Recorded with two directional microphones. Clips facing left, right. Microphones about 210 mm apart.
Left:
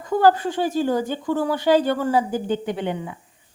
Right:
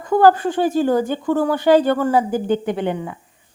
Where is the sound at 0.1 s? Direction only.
50° right (ahead or behind).